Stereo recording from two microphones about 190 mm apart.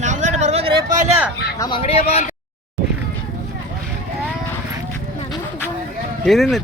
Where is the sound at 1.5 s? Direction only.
20° left (ahead or behind).